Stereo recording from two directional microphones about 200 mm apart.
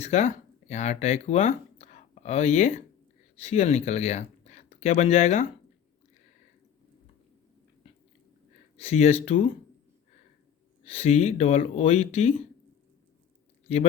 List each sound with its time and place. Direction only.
0.0 s speech: 35° left (ahead or behind)
8.8 s speech: 35° left (ahead or behind)
10.8 s speech: 30° left (ahead or behind)